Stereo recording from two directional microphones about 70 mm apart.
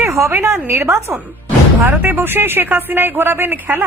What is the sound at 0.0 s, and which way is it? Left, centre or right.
A woman's voice, right.